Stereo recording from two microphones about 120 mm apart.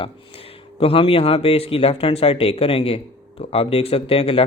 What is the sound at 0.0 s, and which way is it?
Speech, 50° left (ahead or behind).